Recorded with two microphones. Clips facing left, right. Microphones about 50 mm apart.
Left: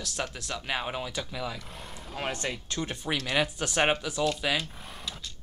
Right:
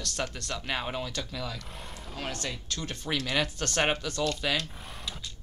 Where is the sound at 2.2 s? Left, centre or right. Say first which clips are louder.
Left 3 dB; left; by 5.3 s centre.